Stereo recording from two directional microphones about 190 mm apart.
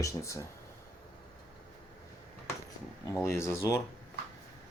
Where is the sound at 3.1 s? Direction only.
15° left (ahead or behind).